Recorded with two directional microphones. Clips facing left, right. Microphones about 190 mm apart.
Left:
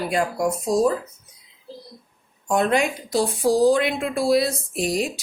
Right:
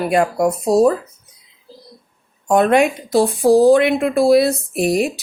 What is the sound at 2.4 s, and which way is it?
A woman's voice, 65° right (ahead or behind).